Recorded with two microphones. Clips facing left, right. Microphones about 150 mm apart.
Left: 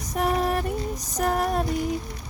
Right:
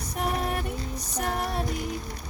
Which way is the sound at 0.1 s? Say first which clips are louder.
Left 5 dB; 40° left (ahead or behind).